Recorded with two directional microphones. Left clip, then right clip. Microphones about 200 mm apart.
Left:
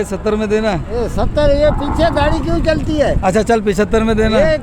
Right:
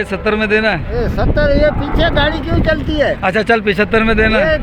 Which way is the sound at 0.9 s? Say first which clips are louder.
Even; 30° left (ahead or behind).